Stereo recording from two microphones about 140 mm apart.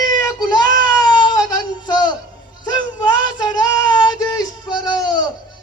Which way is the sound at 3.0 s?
30° left (ahead or behind).